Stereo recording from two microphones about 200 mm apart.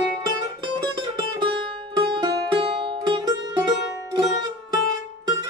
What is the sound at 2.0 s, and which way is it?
Music, 25° right (ahead or behind).